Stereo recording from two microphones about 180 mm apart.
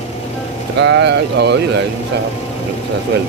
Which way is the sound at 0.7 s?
75° right (ahead or behind).